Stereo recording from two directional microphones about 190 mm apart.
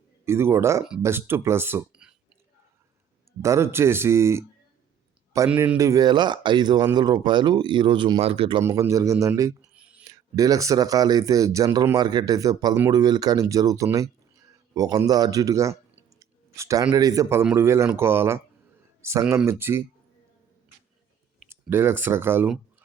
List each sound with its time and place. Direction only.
0.3 s speech: 15° right (ahead or behind)
3.4 s speech: 15° right (ahead or behind)
5.5 s speech: 10° right (ahead or behind); by 8.6 s 25° right (ahead or behind)
8.6 s speech: 15° right (ahead or behind)
9.6 s a sound: 5° right (ahead or behind)
10.0 s speech: 15° right (ahead or behind)
21.5 s speech: 10° right (ahead or behind)